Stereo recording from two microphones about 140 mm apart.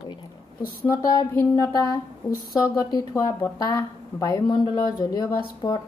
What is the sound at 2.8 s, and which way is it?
A woman's voice, 25° left (ahead or behind).